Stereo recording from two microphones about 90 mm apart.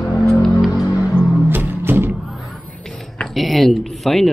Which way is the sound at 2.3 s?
Centre (ahead or behind).